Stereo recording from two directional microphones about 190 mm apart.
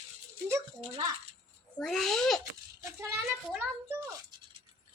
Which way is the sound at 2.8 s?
15° right (ahead or behind).